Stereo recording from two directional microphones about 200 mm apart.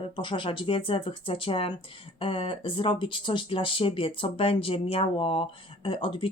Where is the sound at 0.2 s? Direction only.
25° left (ahead or behind).